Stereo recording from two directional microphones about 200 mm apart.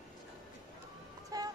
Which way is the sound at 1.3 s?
20° right (ahead or behind).